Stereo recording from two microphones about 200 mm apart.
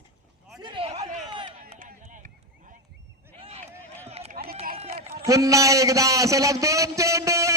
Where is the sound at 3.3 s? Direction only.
30° right (ahead or behind).